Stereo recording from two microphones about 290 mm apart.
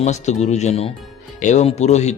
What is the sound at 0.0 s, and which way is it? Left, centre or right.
A man's voice, left.